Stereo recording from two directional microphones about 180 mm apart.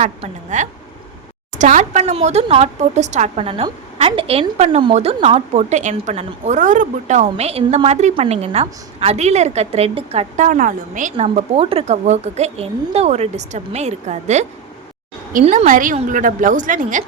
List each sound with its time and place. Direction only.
0.2 s a woman's voice: 40° right (ahead or behind)